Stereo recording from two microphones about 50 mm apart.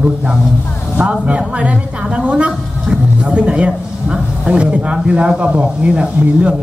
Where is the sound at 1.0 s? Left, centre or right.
Right.